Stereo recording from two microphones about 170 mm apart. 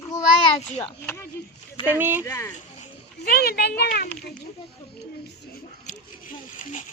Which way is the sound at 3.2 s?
70° left (ahead or behind).